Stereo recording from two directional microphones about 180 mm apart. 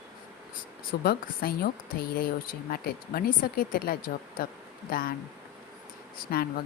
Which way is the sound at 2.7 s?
55° left (ahead or behind).